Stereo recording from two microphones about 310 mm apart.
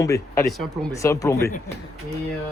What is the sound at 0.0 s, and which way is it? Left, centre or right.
Speech, centre.